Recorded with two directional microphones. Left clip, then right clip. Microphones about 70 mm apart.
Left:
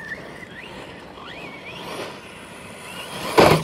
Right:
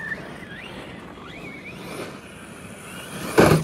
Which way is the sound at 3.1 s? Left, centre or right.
Left.